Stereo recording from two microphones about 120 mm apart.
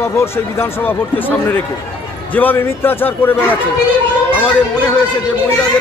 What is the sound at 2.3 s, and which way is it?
A man's voice, 15° left (ahead or behind).